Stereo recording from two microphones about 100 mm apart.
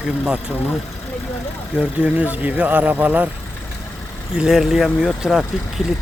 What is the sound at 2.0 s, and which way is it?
Speech, 15° right (ahead or behind).